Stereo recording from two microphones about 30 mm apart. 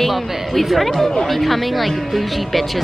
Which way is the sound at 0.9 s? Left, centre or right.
Centre.